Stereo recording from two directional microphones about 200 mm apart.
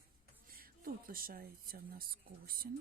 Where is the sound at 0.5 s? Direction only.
45° right (ahead or behind).